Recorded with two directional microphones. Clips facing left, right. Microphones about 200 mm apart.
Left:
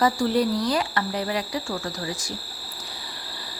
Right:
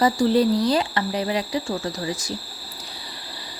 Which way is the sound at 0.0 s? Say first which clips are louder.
Right 3 dB; 25° right (ahead or behind).